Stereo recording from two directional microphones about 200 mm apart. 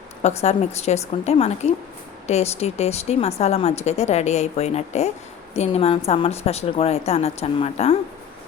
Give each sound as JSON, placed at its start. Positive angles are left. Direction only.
{"t": 0.2, "sound": "speech", "side_deg": 35}